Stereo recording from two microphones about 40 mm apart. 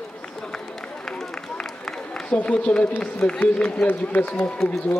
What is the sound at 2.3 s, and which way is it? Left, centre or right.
A man's voice, left.